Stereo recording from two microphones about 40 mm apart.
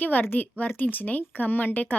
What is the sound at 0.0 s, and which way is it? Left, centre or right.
A woman's voice, left.